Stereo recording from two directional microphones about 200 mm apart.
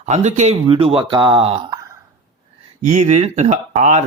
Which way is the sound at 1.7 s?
15° right (ahead or behind).